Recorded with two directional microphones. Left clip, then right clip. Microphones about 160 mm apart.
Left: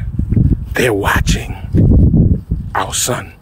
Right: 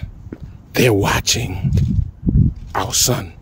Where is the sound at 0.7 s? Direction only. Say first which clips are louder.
Left 1 dB; 25° right (ahead or behind).